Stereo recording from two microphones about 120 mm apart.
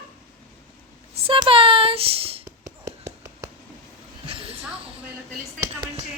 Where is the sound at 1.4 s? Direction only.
50° right (ahead or behind).